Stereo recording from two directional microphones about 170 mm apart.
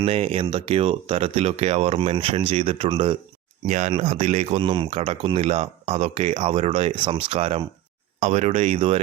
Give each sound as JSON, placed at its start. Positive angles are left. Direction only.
{"t": 0.0, "sound": "speech", "side_deg": -35}
{"t": 3.7, "sound": "speech", "side_deg": -45}